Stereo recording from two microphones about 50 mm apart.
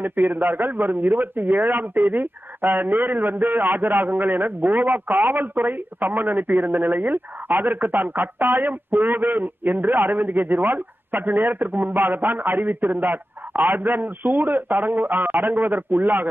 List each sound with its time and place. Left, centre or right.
0.0 s a man's voice: right